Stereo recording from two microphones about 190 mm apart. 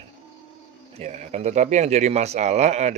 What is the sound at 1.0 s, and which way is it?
Speech, 35° right (ahead or behind).